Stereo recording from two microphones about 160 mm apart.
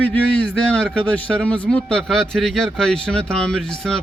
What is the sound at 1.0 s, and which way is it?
A man's voice, 10° left (ahead or behind).